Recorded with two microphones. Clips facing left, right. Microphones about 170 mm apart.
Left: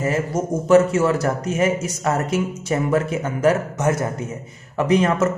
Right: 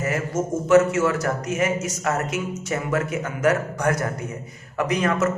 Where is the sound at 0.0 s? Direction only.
30° left (ahead or behind).